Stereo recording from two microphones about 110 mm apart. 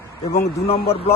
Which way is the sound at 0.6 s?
65° left (ahead or behind).